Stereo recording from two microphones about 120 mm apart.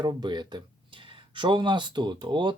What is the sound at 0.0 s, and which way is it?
Speech, 40° right (ahead or behind).